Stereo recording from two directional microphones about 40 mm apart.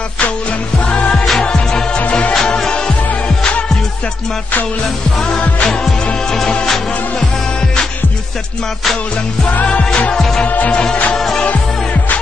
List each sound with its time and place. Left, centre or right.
0.8 s music: left
1.4 s music: centre
2.0 s music: left
5.4 s music: left
6.6 s music: centre
10.7 s music: left